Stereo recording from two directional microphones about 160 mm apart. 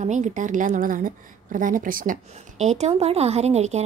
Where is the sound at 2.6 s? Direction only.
45° right (ahead or behind).